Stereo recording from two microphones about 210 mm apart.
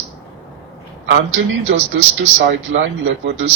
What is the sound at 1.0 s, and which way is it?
A man's voice, 60° right (ahead or behind).